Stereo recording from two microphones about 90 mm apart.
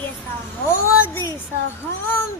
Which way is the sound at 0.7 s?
25° left (ahead or behind).